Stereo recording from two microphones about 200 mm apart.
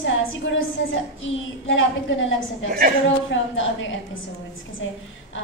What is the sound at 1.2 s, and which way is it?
A woman's voice, 75° left (ahead or behind).